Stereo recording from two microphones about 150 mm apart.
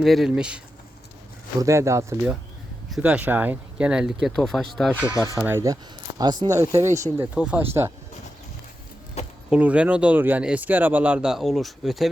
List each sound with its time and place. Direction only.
0.0 s speech: centre (ahead or behind)
1.6 s speech: 20° right (ahead or behind); by 5.0 s centre (ahead or behind)
5.0 s speech: 20° left (ahead or behind)
5.4 s speech: 15° right (ahead or behind)
7.3 s speech: 10° right (ahead or behind)
9.2 s keys jangling: 45° left (ahead or behind)
9.5 s speech: 10° right (ahead or behind)